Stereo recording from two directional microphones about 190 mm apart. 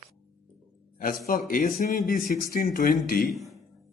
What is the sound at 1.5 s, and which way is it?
Speech, 45° left (ahead or behind).